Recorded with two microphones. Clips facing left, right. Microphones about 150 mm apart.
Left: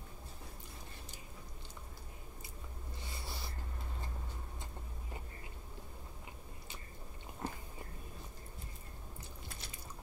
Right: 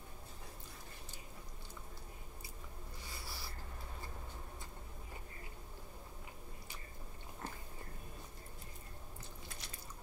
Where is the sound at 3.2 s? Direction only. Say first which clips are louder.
Left 4 dB; 20° left (ahead or behind).